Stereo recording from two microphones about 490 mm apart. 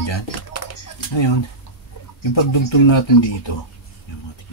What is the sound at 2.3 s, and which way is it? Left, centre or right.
Speech, left.